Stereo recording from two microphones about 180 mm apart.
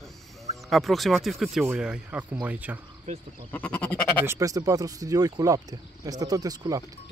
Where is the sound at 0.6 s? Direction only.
Centre (ahead or behind).